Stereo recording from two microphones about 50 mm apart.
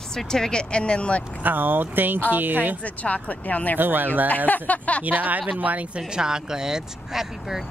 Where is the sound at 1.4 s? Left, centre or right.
Right.